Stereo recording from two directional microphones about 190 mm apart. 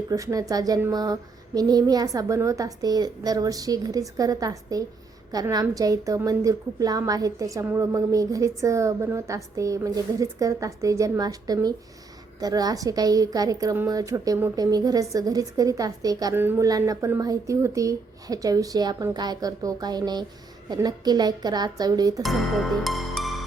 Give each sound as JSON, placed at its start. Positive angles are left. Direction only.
{"t": 0.1, "sound": "a woman's voice", "side_deg": -15}
{"t": 22.2, "sound": "music", "side_deg": 0}